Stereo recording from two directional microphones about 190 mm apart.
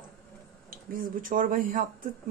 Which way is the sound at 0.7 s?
45° right (ahead or behind).